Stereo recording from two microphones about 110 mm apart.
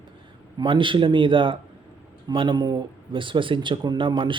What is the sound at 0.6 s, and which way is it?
Speech, 50° right (ahead or behind).